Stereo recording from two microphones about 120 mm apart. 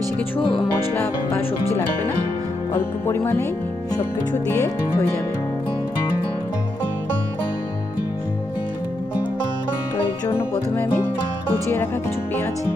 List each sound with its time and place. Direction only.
0.3 s speech: 50° left (ahead or behind)
0.9 s music: 20° left (ahead or behind)
2.7 s music: 20° left (ahead or behind)
4.5 s music: 25° left (ahead or behind)
10.2 s music: 20° left (ahead or behind)